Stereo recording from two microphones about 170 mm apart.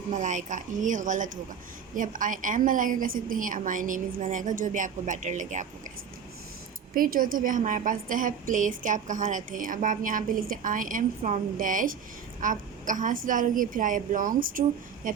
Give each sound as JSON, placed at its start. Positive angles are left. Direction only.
{"t": 0.1, "sound": "a woman's voice", "side_deg": -50}
{"t": 6.9, "sound": "a woman's voice", "side_deg": -55}
{"t": 15.0, "sound": "a sound", "side_deg": -50}